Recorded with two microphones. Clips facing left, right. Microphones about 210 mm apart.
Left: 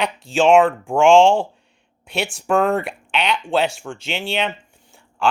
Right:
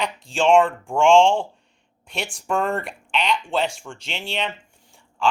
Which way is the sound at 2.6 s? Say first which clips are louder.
Left 5 dB; 5° left (ahead or behind).